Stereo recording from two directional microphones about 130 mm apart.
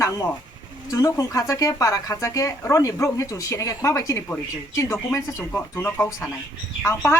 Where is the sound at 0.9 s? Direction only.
25° left (ahead or behind).